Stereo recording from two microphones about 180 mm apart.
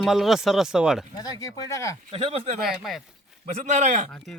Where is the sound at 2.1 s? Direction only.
35° right (ahead or behind).